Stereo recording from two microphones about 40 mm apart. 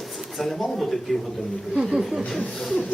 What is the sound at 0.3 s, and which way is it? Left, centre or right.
Speech, centre.